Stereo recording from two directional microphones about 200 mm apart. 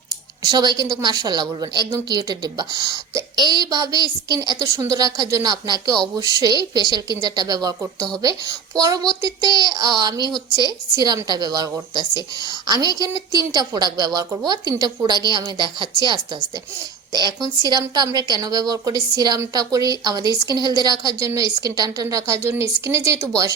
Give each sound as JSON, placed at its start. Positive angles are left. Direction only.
{"t": 0.1, "sound": "a woman's voice", "side_deg": -20}